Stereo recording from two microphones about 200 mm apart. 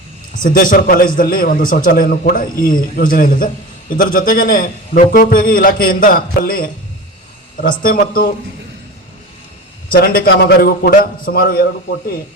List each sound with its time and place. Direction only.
0.4 s a man's voice: 45° left (ahead or behind)
9.9 s a man's voice: 45° left (ahead or behind)